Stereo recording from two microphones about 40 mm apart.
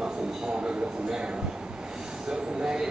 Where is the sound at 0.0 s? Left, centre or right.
Right.